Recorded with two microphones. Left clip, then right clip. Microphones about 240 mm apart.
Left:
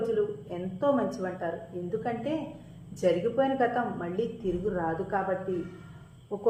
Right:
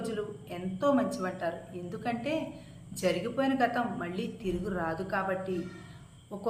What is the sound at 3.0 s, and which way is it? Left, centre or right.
A woman's voice, centre.